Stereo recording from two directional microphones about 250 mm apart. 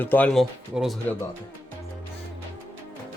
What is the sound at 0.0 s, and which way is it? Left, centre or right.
Speech, centre.